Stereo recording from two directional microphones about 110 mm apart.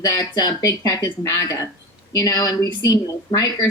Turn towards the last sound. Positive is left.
turn(degrees=35)  # may be behind; listen again after turning